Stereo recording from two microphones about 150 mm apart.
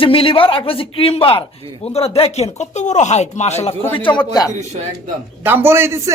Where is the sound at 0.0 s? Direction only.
35° left (ahead or behind).